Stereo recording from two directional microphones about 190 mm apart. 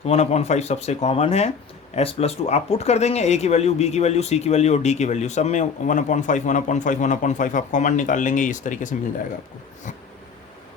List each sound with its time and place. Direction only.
0.0 s speech: 35° left (ahead or behind)